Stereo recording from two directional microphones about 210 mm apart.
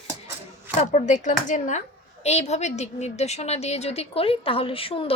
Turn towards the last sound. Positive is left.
turn(degrees=25)  # may be behind; listen again after turning